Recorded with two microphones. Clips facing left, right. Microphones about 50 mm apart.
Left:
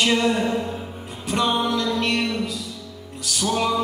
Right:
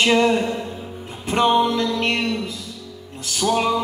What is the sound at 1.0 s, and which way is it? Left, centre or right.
Music, right.